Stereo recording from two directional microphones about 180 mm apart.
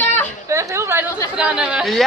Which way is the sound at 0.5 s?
15° right (ahead or behind).